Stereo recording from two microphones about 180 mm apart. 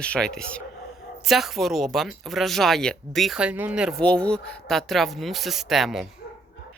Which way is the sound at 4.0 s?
5° left (ahead or behind).